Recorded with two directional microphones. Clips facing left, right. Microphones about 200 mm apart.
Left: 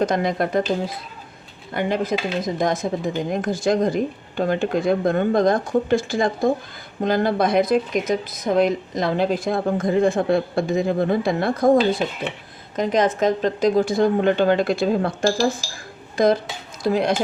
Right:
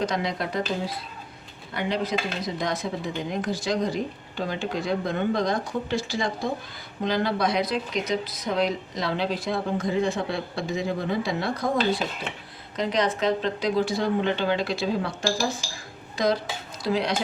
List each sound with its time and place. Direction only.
0.0 s speech: 50° left (ahead or behind)
1.7 s speech: 50° left (ahead or behind)
12.7 s speech: 50° left (ahead or behind)